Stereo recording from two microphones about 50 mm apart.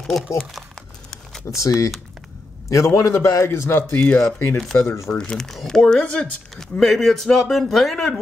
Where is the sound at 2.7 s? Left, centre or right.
Left.